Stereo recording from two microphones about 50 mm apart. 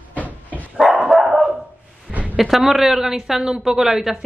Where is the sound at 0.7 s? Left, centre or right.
Centre.